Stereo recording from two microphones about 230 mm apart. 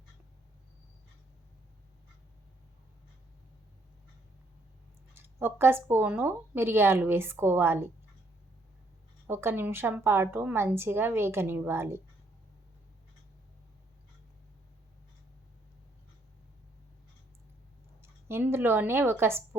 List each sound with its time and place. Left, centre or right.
5.1 s a woman's voice: centre
9.2 s a woman's voice: centre
18.0 s speech: centre